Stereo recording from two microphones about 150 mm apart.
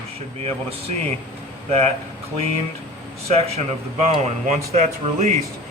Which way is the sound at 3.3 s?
45° right (ahead or behind).